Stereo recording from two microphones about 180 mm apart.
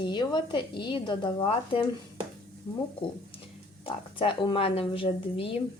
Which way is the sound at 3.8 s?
30° left (ahead or behind).